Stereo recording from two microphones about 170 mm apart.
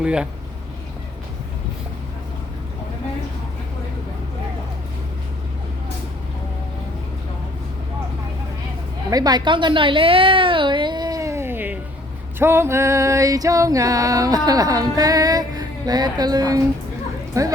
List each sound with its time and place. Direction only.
0.0 s speech: 5° right (ahead or behind)
9.0 s a sound: 20° right (ahead or behind)
12.4 s music: 15° right (ahead or behind)